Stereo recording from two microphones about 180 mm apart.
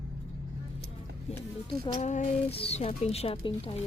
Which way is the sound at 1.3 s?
40° left (ahead or behind).